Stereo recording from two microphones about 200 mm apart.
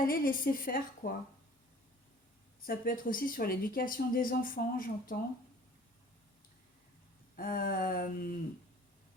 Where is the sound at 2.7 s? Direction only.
45° left (ahead or behind).